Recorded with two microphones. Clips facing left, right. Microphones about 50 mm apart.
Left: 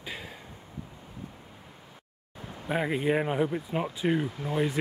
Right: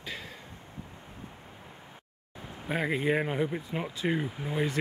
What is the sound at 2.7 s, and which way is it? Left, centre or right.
Speech, centre.